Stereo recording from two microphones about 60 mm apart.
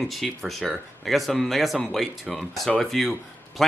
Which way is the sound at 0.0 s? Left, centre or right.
Centre.